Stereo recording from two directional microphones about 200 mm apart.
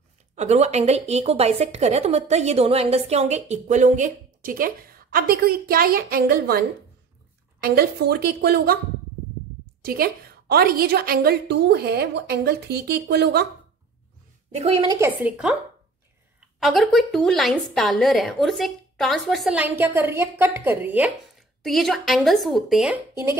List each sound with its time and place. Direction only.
0.4 s a woman's voice: 35° right (ahead or behind); by 6.6 s 50° right (ahead or behind)
7.6 s a woman's voice: 50° right (ahead or behind)
9.8 s a woman's voice: 50° right (ahead or behind)
14.5 s a woman's voice: 30° right (ahead or behind)
14.9 s a woman's voice: 10° right (ahead or behind)